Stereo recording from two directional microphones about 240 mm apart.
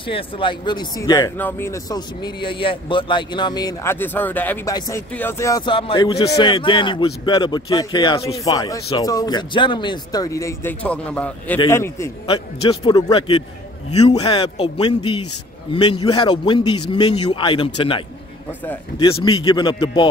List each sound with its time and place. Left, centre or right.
0.0 s a man's voice: left